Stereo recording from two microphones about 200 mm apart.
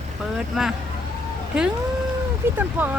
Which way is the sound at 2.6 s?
10° right (ahead or behind).